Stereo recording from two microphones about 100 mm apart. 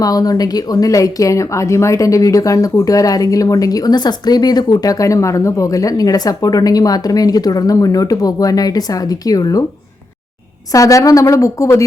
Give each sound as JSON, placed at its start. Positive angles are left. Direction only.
{"t": 0.0, "sound": "speech", "side_deg": 40}
{"t": 10.7, "sound": "speech", "side_deg": 35}